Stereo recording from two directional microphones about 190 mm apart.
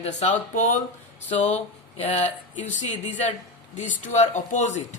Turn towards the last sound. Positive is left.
turn(degrees=40)  # may be behind; listen again after turning